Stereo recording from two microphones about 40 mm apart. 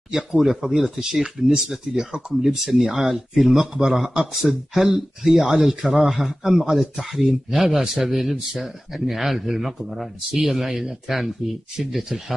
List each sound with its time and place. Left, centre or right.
0.1 s a man's voice: centre